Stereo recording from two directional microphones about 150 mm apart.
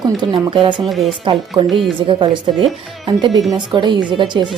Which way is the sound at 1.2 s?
35° right (ahead or behind).